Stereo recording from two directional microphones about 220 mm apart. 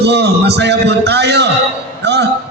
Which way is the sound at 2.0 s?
50° right (ahead or behind).